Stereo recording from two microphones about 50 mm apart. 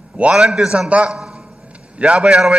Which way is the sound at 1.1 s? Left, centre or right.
Centre.